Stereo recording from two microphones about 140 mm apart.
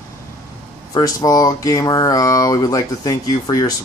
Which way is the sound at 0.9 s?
25° left (ahead or behind).